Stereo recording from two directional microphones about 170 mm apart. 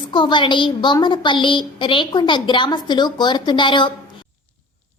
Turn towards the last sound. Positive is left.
turn(degrees=30)  # may be behind; listen again after turning